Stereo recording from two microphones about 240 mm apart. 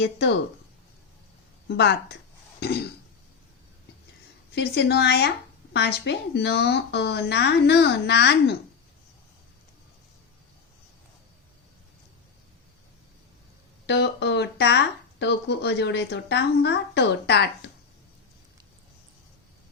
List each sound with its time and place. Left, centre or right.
0.0 s speech: left
1.6 s speech: left
4.5 s speech: left
13.8 s speech: left